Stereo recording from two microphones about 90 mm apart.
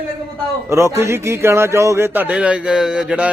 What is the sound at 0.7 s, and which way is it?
Speech, 30° right (ahead or behind).